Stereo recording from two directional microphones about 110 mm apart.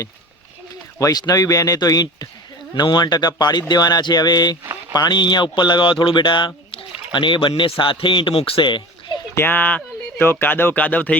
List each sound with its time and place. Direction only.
0.9 s speech: 30° left (ahead or behind); by 9.1 s 45° left (ahead or behind)
9.3 s speech: 20° left (ahead or behind)